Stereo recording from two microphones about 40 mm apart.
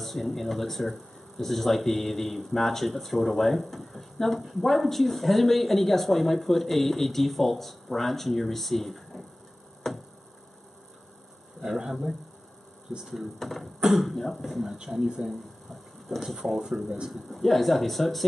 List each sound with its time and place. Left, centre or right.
0.0 s speech: centre
9.8 s a sound: centre
11.6 s speech: centre
15.2 s speech: centre
16.1 s speech: centre
17.1 s speech: centre